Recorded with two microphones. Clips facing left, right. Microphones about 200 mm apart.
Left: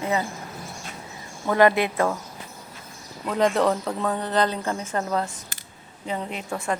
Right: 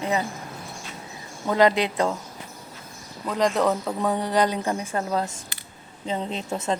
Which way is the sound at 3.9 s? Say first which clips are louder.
Right 1 dB; 15° right (ahead or behind).